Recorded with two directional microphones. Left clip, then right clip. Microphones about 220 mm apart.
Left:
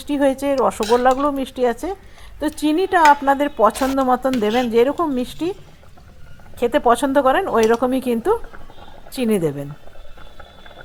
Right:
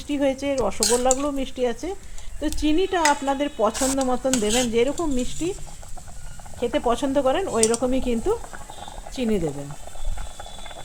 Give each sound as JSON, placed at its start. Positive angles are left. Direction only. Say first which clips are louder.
{"t": 0.1, "sound": "speech", "louder": "left 5 dB", "side_deg": 15}
{"t": 6.7, "sound": "speech", "louder": "left 7 dB", "side_deg": 15}